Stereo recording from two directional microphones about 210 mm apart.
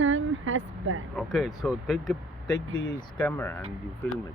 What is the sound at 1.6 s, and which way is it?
Speech, centre (ahead or behind).